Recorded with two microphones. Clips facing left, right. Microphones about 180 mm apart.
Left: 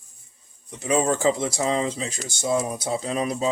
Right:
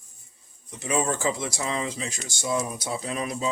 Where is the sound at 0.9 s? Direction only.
35° left (ahead or behind).